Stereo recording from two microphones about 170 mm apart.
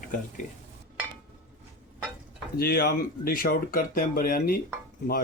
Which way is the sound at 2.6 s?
65° left (ahead or behind).